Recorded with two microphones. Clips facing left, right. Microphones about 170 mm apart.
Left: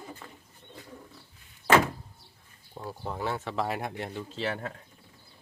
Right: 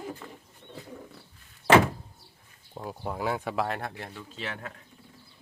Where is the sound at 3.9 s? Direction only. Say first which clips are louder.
Left 5 dB; 25° left (ahead or behind).